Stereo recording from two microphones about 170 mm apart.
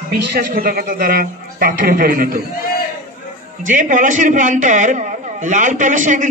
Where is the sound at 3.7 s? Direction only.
50° right (ahead or behind).